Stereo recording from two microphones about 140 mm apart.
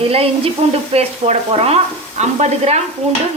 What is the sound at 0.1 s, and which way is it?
Speech, 45° right (ahead or behind).